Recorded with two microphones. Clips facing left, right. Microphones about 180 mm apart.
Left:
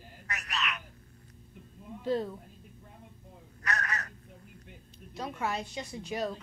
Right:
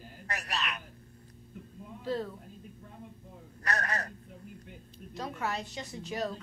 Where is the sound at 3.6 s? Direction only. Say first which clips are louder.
Right 2 dB; 35° right (ahead or behind).